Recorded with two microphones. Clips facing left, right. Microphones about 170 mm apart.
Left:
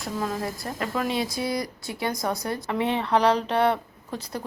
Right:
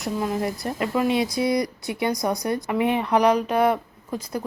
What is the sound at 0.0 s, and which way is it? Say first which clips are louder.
Speech: right 4 dB; 20° right (ahead or behind).